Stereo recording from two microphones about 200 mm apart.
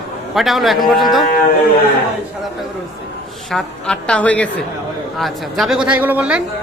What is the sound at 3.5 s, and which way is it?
A man's voice, 5° left (ahead or behind).